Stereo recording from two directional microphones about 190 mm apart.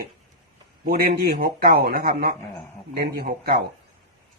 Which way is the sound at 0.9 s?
50° right (ahead or behind).